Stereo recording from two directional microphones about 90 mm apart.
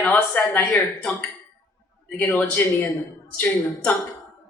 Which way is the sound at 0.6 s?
20° left (ahead or behind).